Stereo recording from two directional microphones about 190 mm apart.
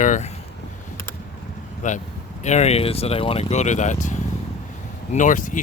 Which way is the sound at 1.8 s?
40° left (ahead or behind).